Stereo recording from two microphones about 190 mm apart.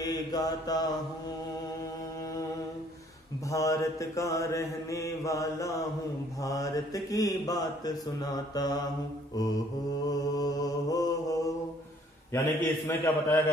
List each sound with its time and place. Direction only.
0.0 s mantra: 20° left (ahead or behind)
3.4 s mantra: 15° left (ahead or behind)
6.4 s speech: 20° left (ahead or behind)
10.0 s mantra: 20° left (ahead or behind)